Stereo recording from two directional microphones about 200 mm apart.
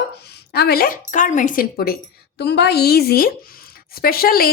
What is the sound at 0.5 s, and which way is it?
Speech, 50° left (ahead or behind).